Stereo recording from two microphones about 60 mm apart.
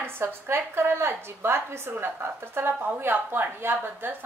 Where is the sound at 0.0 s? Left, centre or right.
Right.